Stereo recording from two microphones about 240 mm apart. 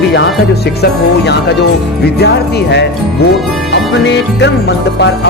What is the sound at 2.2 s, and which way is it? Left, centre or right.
Speech, left.